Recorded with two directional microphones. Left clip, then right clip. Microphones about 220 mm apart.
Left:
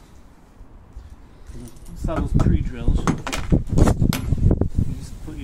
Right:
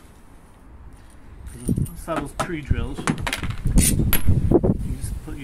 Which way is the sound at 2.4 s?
Centre (ahead or behind).